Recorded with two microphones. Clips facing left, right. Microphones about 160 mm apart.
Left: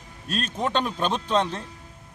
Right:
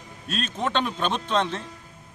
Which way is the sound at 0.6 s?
10° left (ahead or behind).